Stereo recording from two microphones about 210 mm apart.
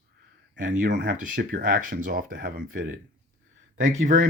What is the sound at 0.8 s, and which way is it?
Speech, 55° right (ahead or behind).